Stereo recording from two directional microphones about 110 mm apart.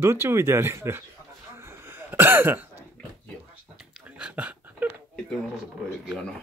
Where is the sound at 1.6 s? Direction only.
25° right (ahead or behind).